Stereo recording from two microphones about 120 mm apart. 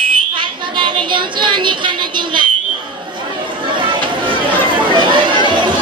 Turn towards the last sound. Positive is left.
turn(degrees=-40)  # may be behind; listen again after turning